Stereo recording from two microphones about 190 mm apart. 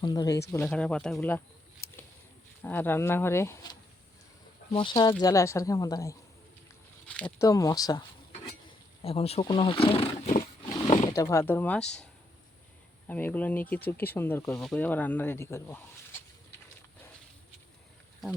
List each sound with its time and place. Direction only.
0.0 s speech: 20° left (ahead or behind)
0.5 s speech: 5° left (ahead or behind)
2.6 s speech: 10° left (ahead or behind)
7.1 s speech: 5° left (ahead or behind)
7.4 s speech: 15° left (ahead or behind)
9.0 s speech: 30° left (ahead or behind)
10.6 s wild animals: 25° left (ahead or behind)
11.1 s speech: 15° left (ahead or behind)
13.1 s speech: 10° left (ahead or behind)